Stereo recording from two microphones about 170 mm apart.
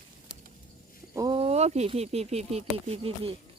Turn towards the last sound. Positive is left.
turn(degrees=-35)  # may be behind; listen again after turning